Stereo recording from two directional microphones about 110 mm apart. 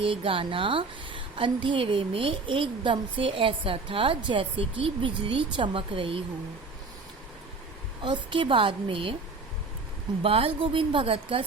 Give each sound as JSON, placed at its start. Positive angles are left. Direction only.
{"t": 0.0, "sound": "a woman's voice", "side_deg": -55}
{"t": 8.0, "sound": "a woman's voice", "side_deg": -45}
{"t": 10.2, "sound": "a woman's voice", "side_deg": -60}